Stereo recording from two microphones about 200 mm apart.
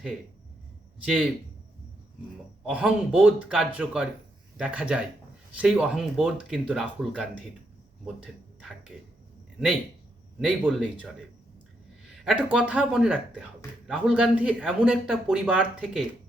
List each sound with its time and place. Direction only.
1.0 s speech: centre (ahead or behind)
2.6 s speech: 5° right (ahead or behind)
10.7 s speech: centre (ahead or behind)
12.1 s speech: centre (ahead or behind)